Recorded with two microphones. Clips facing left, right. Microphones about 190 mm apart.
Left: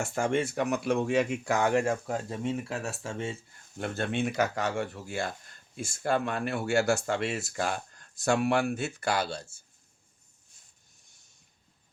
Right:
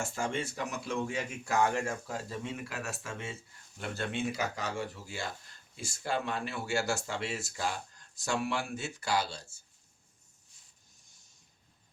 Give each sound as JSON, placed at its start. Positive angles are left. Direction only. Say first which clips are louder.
{"t": 0.1, "sound": "speech", "louder": "left 7 dB", "side_deg": 55}
{"t": 2.4, "sound": "speech", "louder": "left 7 dB", "side_deg": 30}
{"t": 3.8, "sound": "speech", "louder": "left 5 dB", "side_deg": 55}